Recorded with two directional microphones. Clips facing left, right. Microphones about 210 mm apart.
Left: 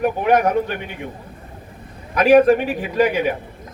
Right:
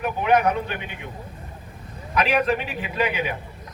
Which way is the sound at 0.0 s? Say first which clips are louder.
Left 4 dB; 50° left (ahead or behind).